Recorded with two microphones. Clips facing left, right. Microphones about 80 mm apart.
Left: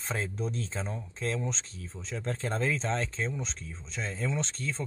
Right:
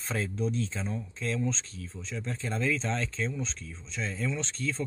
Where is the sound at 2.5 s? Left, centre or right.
Left.